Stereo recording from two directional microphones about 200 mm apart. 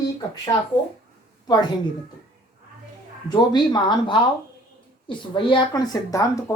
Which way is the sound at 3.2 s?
20° left (ahead or behind).